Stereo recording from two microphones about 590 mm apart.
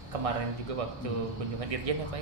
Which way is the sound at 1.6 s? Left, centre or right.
Right.